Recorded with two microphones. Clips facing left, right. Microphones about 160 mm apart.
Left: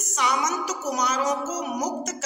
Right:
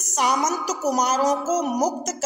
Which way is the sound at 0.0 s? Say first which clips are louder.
Right 3 dB; 40° right (ahead or behind).